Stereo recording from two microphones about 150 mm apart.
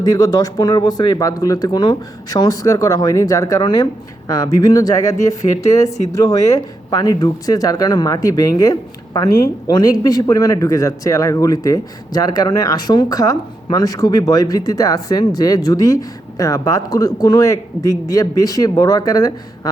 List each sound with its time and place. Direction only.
0.0 s speech: 25° left (ahead or behind)
5.4 s speech: 45° left (ahead or behind)
5.8 s speech: 20° left (ahead or behind)